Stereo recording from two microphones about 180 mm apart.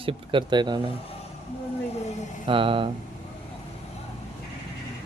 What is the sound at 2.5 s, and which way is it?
Speech, 30° right (ahead or behind).